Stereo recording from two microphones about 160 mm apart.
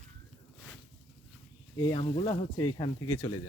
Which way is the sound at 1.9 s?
35° left (ahead or behind).